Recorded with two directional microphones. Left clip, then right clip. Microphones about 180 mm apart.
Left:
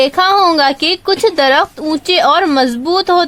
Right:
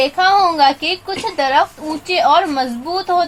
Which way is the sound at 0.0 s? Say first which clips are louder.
Left 3 dB; 80° left.